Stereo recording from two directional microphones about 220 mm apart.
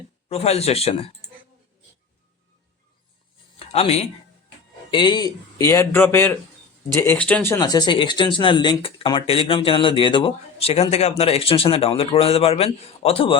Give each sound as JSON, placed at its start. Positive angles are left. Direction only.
{"t": 0.3, "sound": "speech", "side_deg": 30}
{"t": 3.6, "sound": "speech", "side_deg": 25}